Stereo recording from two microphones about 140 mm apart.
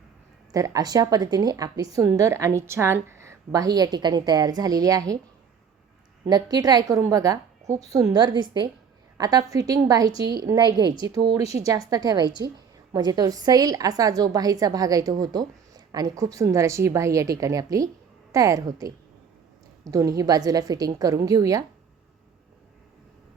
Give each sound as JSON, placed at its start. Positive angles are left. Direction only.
{"t": 0.5, "sound": "a woman's voice", "side_deg": -25}
{"t": 6.2, "sound": "a woman's voice", "side_deg": -30}